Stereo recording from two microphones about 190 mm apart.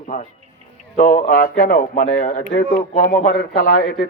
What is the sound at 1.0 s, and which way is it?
Speech, 45° left (ahead or behind).